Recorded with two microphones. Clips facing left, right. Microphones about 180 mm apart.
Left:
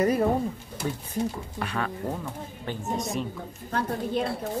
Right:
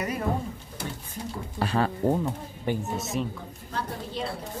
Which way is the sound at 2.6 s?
10° right (ahead or behind).